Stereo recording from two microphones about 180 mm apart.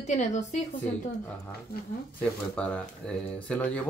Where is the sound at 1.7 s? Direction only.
55° left (ahead or behind).